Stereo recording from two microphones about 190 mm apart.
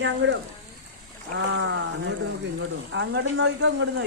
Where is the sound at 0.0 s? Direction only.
75° right (ahead or behind).